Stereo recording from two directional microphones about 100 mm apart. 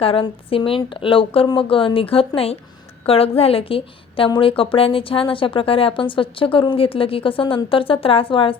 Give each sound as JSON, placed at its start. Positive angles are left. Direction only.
{"t": 0.0, "sound": "a woman's voice", "side_deg": 65}